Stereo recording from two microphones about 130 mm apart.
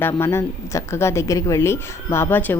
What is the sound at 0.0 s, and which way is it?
Speech, 20° left (ahead or behind).